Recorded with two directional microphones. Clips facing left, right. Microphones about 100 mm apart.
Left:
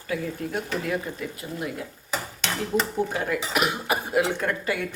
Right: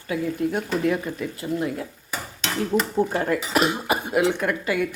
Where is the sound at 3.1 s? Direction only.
40° right (ahead or behind).